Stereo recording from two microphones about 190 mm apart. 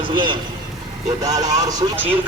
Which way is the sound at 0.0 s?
25° right (ahead or behind).